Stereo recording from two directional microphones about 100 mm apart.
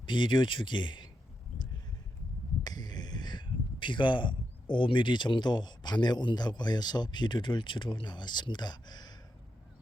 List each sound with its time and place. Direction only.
0.0 s speech: 50° left (ahead or behind)
2.6 s speech: 45° left (ahead or behind)